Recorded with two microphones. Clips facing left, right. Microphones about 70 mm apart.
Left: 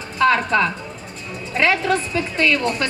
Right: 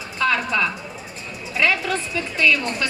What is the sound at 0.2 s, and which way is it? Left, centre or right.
A woman's voice, left.